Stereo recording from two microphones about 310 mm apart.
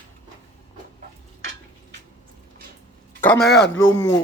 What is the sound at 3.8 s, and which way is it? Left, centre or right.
Speech, centre.